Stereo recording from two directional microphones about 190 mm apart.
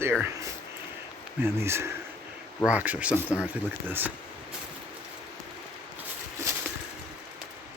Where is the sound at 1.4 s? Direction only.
15° right (ahead or behind).